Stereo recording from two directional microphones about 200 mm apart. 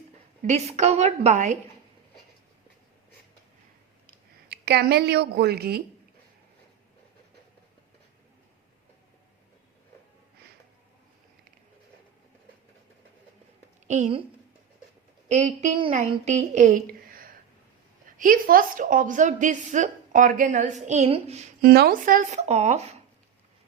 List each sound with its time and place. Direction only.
0.4 s a woman's voice: 35° right (ahead or behind)
4.4 s a woman's voice: 55° right (ahead or behind)
13.8 s a woman's voice: 35° right (ahead or behind)
15.3 s a woman's voice: 35° right (ahead or behind)
21.7 s a woman's voice: 50° right (ahead or behind); by 23.0 s 35° right (ahead or behind)